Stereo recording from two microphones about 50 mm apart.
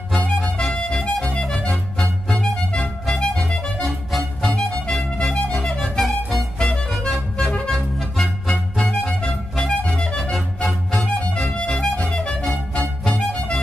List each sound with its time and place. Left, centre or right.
0.4 s music: centre
5.9 s music: centre
7.7 s music: centre
8.8 s music: centre
10.3 s music: centre; by 13.6 s left